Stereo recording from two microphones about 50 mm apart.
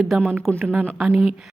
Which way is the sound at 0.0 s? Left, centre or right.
Centre.